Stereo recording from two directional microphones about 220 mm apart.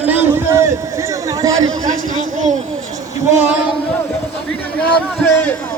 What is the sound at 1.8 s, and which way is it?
Speech, 35° right (ahead or behind).